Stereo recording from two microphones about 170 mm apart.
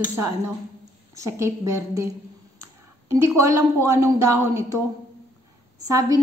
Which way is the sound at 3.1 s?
20° right (ahead or behind).